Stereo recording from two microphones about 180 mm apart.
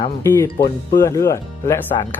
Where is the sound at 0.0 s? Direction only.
15° left (ahead or behind).